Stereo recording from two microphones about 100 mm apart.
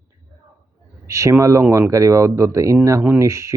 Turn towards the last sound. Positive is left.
turn(degrees=-30)  # may be behind; listen again after turning